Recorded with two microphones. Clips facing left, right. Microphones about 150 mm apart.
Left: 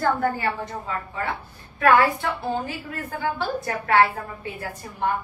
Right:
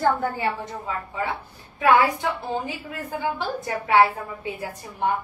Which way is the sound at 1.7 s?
15° right (ahead or behind).